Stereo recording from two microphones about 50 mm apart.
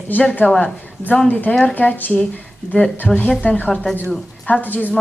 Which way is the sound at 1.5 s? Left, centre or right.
Left.